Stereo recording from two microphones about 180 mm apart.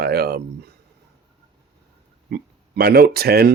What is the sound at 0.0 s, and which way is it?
Speech, 60° right (ahead or behind).